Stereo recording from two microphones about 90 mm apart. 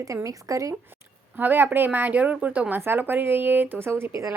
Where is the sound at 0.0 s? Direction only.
40° right (ahead or behind).